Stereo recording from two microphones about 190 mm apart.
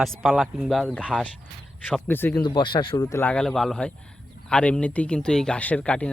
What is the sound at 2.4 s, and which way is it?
Speech, 25° left (ahead or behind).